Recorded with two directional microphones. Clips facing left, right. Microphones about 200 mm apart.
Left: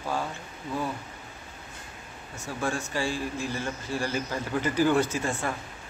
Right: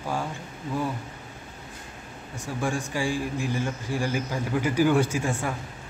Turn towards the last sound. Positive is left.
turn(degrees=-10)  # may be behind; listen again after turning